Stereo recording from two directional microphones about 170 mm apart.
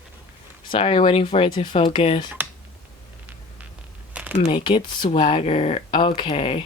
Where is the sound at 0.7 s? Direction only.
30° left (ahead or behind).